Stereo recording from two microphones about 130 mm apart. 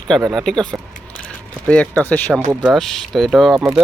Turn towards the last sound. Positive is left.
turn(degrees=-5)  # may be behind; listen again after turning